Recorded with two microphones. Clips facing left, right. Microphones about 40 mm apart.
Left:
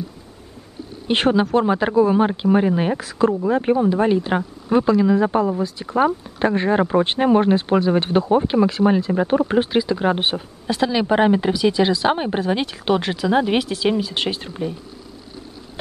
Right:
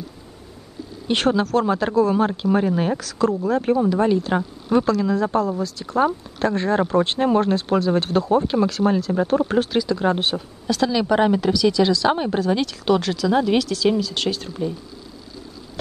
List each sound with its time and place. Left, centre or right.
1.0 s speech: centre
14.5 s speech: left